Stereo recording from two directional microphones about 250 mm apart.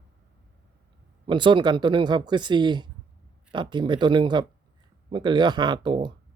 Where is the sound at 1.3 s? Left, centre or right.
Centre.